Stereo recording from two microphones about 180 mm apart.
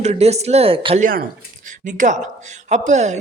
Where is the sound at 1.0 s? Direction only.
50° right (ahead or behind).